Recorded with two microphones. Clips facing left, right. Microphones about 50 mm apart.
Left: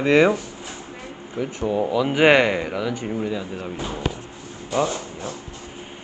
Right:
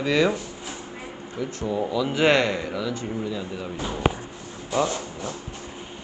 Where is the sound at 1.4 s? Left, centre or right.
Centre.